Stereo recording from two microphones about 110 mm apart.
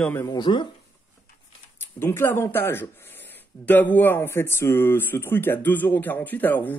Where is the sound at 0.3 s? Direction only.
45° left (ahead or behind).